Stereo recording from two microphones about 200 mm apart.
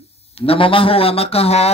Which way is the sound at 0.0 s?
30° left (ahead or behind).